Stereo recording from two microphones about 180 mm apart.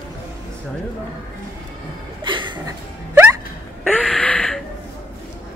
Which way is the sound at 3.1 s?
10° right (ahead or behind).